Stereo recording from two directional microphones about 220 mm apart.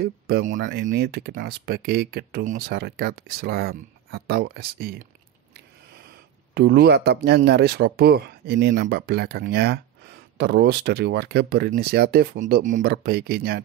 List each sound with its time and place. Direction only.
0.0 s speech: 45° right (ahead or behind)
6.5 s speech: 45° right (ahead or behind)